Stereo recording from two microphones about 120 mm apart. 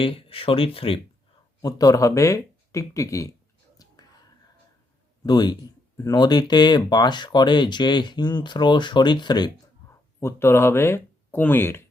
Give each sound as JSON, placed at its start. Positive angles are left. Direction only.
{"t": 0.0, "sound": "speech", "side_deg": 50}
{"t": 1.6, "sound": "speech", "side_deg": 30}
{"t": 3.8, "sound": "whispering", "side_deg": 30}
{"t": 5.2, "sound": "speech", "side_deg": 35}
{"t": 10.2, "sound": "speech", "side_deg": 20}